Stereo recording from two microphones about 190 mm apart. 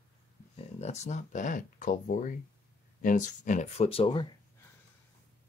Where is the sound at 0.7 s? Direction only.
35° left (ahead or behind).